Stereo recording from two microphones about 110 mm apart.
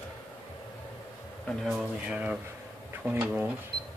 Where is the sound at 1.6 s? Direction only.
5° right (ahead or behind).